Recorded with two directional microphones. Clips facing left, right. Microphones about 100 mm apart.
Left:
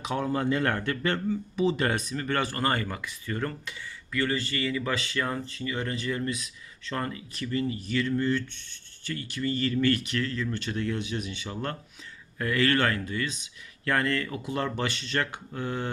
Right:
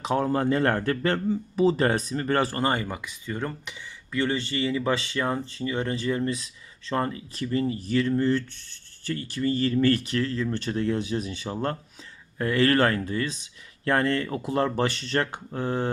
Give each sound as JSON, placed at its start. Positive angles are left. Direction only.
{"t": 0.0, "sound": "speech", "side_deg": -35}
{"t": 2.6, "sound": "speech", "side_deg": -20}